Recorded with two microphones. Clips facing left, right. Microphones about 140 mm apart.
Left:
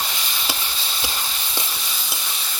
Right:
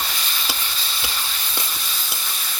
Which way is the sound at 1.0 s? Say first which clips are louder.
Left 2 dB; 20° left (ahead or behind).